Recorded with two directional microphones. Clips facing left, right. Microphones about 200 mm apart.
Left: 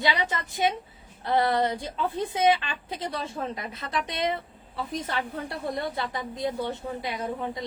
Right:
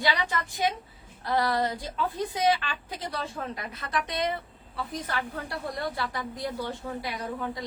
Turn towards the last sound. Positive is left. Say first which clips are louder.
# left 2 dB
turn(degrees=20)  # may be behind; listen again after turning